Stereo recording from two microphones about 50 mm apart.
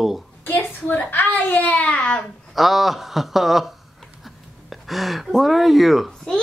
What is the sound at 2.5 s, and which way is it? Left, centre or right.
Speech, centre.